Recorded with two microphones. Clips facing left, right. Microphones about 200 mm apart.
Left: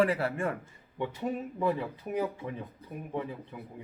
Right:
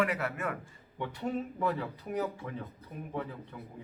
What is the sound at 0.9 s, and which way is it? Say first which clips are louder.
Speech: left 1 dB; 15° left (ahead or behind).